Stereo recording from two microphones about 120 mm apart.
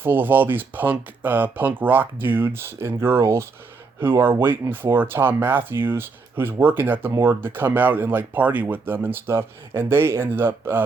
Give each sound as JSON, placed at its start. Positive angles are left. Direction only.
{"t": 0.0, "sound": "speech", "side_deg": -15}